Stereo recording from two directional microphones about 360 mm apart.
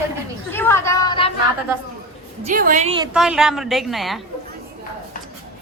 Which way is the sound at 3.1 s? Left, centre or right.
Centre.